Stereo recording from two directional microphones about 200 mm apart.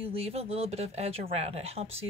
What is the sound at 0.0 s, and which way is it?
Speech, 30° right (ahead or behind).